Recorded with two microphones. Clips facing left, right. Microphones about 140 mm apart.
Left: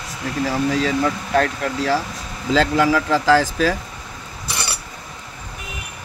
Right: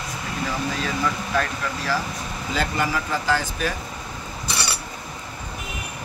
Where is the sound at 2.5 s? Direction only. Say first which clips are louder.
Left 9 dB; 90° left.